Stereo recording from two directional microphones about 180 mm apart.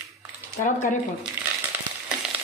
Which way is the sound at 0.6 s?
45° left (ahead or behind).